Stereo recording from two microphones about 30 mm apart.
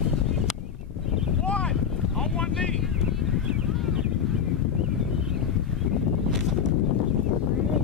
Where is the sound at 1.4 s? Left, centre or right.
Left.